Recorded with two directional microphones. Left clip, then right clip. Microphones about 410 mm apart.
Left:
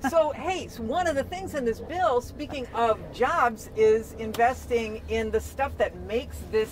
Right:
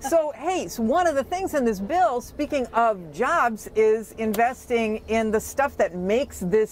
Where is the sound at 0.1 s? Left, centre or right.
Right.